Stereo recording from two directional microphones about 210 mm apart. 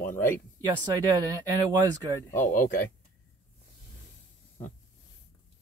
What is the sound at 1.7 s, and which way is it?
Speech, 20° right (ahead or behind).